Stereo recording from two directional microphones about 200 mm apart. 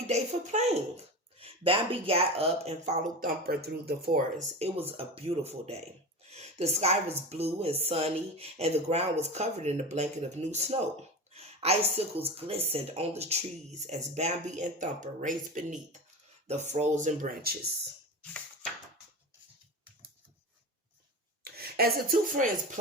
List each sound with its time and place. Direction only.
0.1 s a woman's voice: 35° right (ahead or behind)
4.5 s a woman's voice: 30° right (ahead or behind)
11.3 s a sound: 30° right (ahead or behind)
12.2 s a woman's voice: 30° right (ahead or behind)
21.4 s speech: 50° right (ahead or behind)